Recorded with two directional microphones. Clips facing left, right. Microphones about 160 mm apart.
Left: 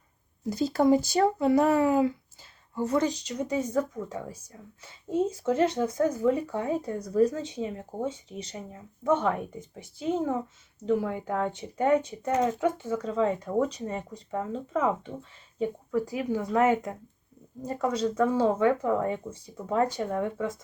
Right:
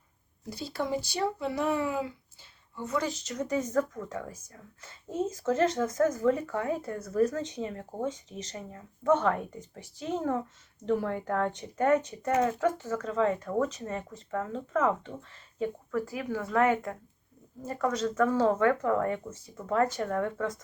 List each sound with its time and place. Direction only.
0.5 s speech: 45° left (ahead or behind)
2.7 s speech: 35° left (ahead or behind)
3.0 s speech: 15° left (ahead or behind)